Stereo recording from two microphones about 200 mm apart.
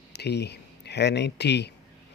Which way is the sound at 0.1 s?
55° left (ahead or behind).